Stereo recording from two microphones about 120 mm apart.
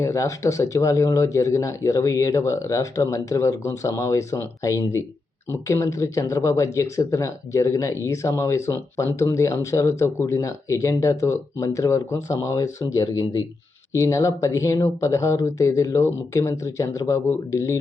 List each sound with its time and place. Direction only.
0.0 s speech: 25° left (ahead or behind)